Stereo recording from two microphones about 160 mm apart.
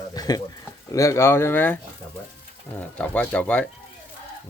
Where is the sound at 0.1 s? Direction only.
25° left (ahead or behind).